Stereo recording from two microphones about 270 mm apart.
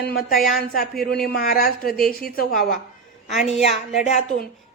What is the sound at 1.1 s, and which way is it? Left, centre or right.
A woman's voice, left.